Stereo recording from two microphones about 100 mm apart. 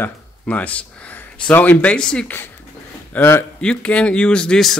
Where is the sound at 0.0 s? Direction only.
15° left (ahead or behind).